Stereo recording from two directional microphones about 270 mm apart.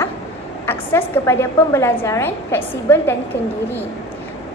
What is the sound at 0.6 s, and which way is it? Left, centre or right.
A woman's voice, centre.